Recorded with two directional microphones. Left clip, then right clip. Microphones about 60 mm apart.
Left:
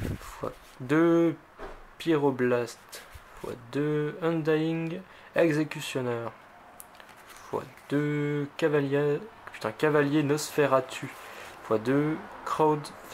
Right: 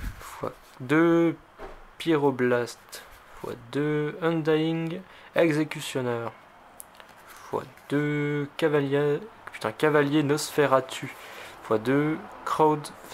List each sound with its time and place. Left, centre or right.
0.2 s speech: centre
7.5 s speech: centre